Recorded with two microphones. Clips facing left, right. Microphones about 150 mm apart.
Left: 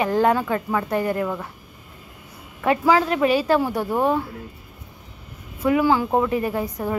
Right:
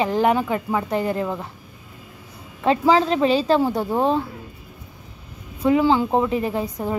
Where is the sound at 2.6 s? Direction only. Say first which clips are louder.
Right 1 dB; 25° right (ahead or behind).